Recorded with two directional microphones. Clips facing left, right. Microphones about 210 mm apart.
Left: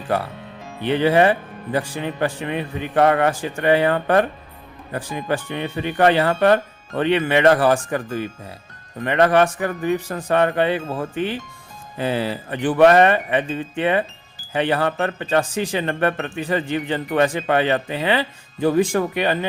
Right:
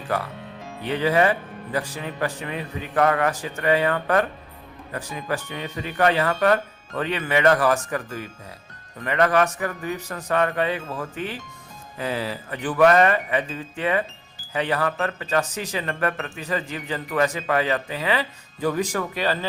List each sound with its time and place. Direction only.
0.8 s speech: 30° left (ahead or behind)